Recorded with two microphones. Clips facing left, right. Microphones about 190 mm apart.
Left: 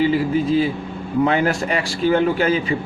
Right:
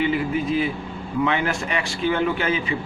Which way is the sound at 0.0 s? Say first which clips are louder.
Left 4 dB; 35° left (ahead or behind).